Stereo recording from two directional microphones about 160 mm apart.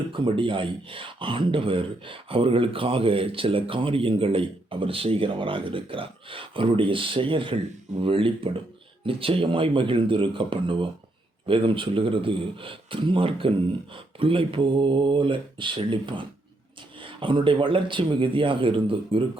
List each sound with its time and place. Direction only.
0.1 s speech: 30° right (ahead or behind)